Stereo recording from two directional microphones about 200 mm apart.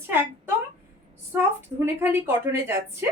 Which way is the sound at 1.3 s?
10° right (ahead or behind).